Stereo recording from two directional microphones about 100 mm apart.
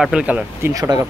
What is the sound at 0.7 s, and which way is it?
Speech, 40° right (ahead or behind).